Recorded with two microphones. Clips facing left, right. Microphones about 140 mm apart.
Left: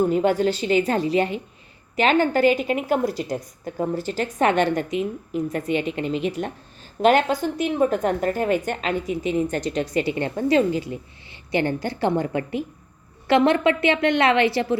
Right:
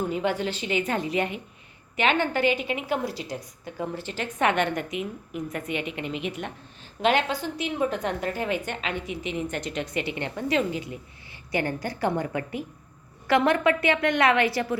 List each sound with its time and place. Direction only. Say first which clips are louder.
0.0 s a woman's voice: left 7 dB; 45° left (ahead or behind)
7.0 s a woman's voice: left 6 dB; 45° left (ahead or behind); by 14.8 s 25° left (ahead or behind)